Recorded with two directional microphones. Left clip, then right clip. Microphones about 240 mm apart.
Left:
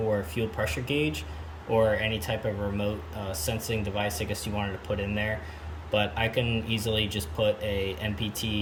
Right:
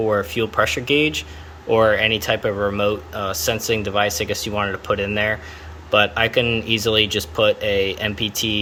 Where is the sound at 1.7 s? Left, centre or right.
Right.